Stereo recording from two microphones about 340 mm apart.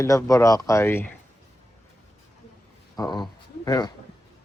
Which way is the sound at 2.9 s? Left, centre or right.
Centre.